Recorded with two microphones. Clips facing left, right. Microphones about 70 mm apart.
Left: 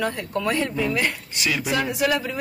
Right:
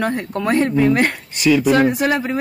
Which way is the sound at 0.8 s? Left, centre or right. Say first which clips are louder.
Right 8 dB; right.